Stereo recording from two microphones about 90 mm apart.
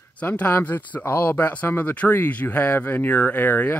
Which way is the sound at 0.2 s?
15° left (ahead or behind).